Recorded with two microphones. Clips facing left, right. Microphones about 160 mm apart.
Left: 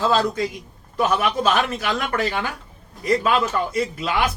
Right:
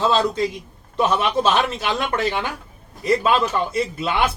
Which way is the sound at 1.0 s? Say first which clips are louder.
Right 1 dB; 25° right (ahead or behind).